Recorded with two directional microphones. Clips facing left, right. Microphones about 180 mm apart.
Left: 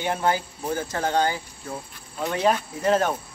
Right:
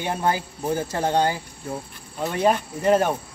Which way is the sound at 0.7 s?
30° right (ahead or behind).